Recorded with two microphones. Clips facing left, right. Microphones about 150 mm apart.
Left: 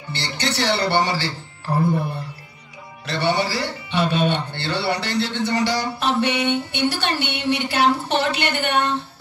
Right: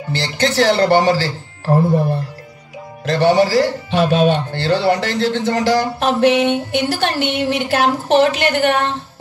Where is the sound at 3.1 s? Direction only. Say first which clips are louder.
Right 9 dB; 45° right (ahead or behind).